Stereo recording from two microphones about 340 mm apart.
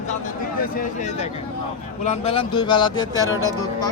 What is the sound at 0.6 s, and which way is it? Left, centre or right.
Speech, left.